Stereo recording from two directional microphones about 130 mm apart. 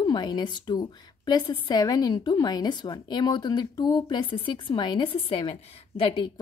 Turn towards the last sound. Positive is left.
turn(degrees=40)  # may be behind; listen again after turning